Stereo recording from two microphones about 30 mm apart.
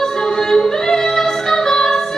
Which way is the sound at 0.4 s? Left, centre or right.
Centre.